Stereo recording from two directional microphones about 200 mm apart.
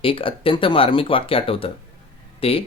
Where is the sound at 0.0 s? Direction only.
25° left (ahead or behind).